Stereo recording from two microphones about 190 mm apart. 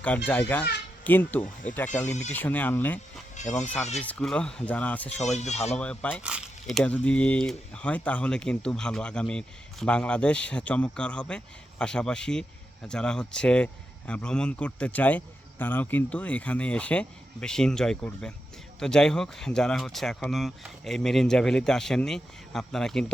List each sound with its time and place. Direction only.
0.3 s speech: 10° left (ahead or behind)
3.4 s a sound: 40° left (ahead or behind)
4.0 s speech: 5° left (ahead or behind)
5.2 s speech: 35° left (ahead or behind)
5.7 s speech: 5° left (ahead or behind)
6.2 s speech: 5° right (ahead or behind)